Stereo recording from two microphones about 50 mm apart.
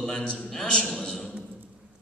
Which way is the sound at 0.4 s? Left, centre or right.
Centre.